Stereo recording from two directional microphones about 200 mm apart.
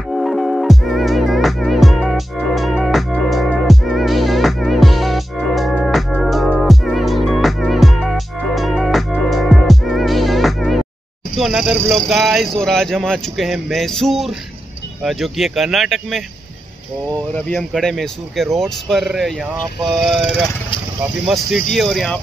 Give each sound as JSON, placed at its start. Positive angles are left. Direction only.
{"t": 0.1, "sound": "music", "side_deg": 0}
{"t": 11.3, "sound": "speech", "side_deg": 0}
{"t": 17.6, "sound": "speech", "side_deg": 0}
{"t": 21.3, "sound": "speech", "side_deg": 0}